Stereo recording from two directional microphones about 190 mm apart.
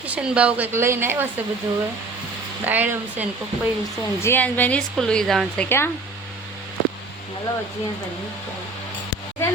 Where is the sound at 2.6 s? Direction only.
10° right (ahead or behind).